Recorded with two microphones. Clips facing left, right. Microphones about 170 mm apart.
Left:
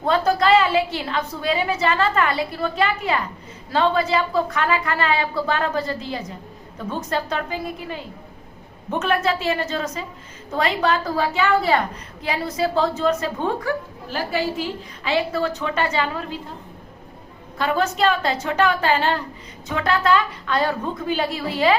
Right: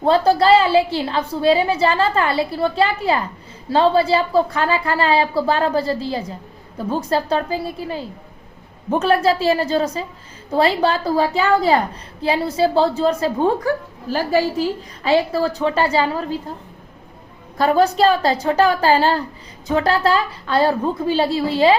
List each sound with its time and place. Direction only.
0.0 s a woman's voice: 30° right (ahead or behind)
17.6 s a woman's voice: 35° right (ahead or behind)